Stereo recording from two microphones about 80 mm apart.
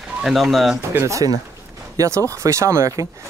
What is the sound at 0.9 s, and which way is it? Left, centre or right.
Speech, right.